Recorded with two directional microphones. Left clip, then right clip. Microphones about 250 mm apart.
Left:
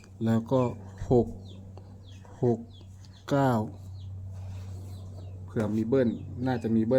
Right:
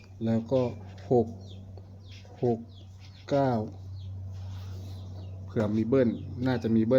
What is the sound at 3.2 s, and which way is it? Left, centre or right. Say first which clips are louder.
Speech: even; left.